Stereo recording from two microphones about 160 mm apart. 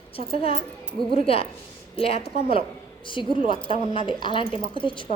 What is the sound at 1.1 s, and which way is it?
A woman's voice, 35° left (ahead or behind).